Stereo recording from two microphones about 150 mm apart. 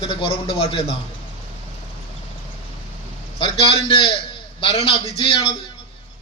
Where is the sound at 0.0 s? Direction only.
35° left (ahead or behind).